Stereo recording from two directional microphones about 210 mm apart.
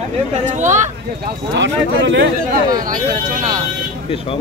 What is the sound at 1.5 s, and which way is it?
Speech, 55° right (ahead or behind).